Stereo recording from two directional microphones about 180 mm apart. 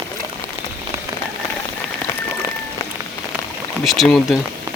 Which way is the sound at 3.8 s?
Centre (ahead or behind).